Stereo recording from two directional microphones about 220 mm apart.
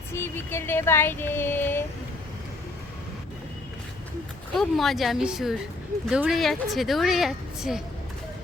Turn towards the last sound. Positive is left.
turn(degrees=0)  # may be behind; listen again after turning